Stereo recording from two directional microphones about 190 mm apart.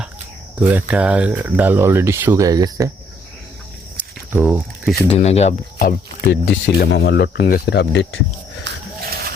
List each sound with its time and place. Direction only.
0.7 s speech: 10° right (ahead or behind)
4.3 s speech: 10° right (ahead or behind)
5.0 s speech: 30° left (ahead or behind)
5.8 s speech: 50° left (ahead or behind)
6.7 s speech: 60° left (ahead or behind)
8.6 s a sound: 55° right (ahead or behind)